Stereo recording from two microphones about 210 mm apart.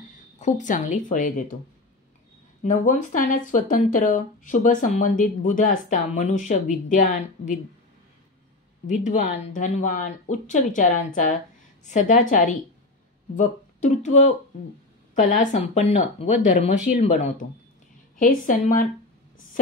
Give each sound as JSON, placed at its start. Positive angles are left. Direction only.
{"t": 0.4, "sound": "speech", "side_deg": 35}
{"t": 2.6, "sound": "speech", "side_deg": 35}
{"t": 8.8, "sound": "speech", "side_deg": 35}